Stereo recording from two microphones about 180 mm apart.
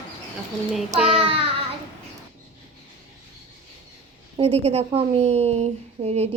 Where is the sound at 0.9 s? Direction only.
Centre (ahead or behind).